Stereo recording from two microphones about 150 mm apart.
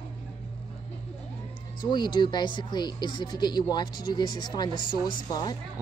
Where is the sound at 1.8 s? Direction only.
30° left (ahead or behind).